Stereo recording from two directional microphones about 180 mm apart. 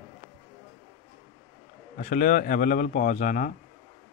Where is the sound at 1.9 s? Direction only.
50° left (ahead or behind).